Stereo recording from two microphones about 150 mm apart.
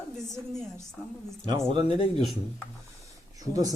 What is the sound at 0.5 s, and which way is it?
Speech, 5° left (ahead or behind).